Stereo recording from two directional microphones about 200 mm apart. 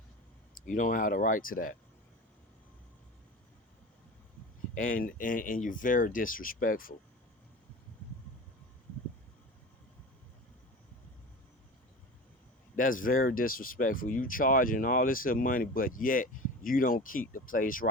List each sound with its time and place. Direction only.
0.7 s speech: 40° left (ahead or behind)
4.8 s speech: 45° left (ahead or behind)
12.7 s speech: 45° left (ahead or behind)